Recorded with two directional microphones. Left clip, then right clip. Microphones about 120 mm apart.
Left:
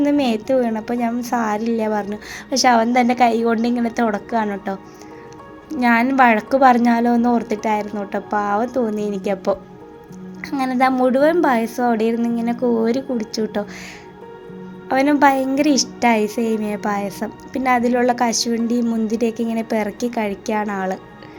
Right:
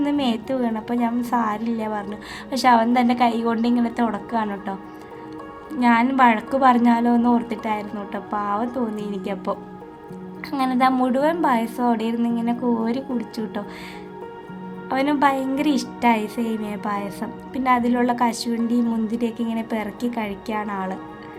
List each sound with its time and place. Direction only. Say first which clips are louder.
0.0 s a woman's voice: left 5 dB; 30° left (ahead or behind)
5.8 s a woman's voice: left 2 dB; 35° left (ahead or behind)
10.5 s a woman's voice: left 2 dB; 25° left (ahead or behind)
14.8 s a woman's voice: left 5 dB; 35° left (ahead or behind)